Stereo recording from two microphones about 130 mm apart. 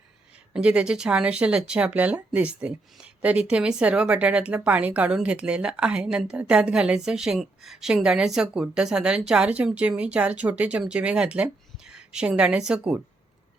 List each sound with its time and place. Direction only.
0.5 s speech: 10° right (ahead or behind)